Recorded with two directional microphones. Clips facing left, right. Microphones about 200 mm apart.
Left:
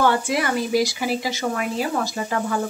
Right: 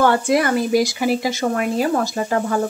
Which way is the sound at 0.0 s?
45° right (ahead or behind).